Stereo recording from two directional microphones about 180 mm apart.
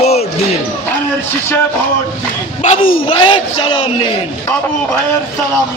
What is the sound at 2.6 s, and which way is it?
Speech, 45° left (ahead or behind).